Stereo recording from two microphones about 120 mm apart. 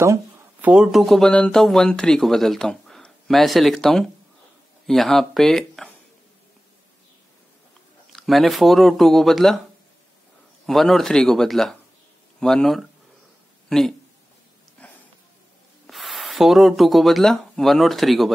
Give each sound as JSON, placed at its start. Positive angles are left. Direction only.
{"t": 0.0, "sound": "a sound", "side_deg": -25}
{"t": 0.7, "sound": "speech", "side_deg": -5}
{"t": 8.1, "sound": "speech", "side_deg": 0}
{"t": 10.7, "sound": "speech", "side_deg": 0}
{"t": 14.8, "sound": "a sound", "side_deg": 10}
{"t": 15.9, "sound": "speech", "side_deg": 0}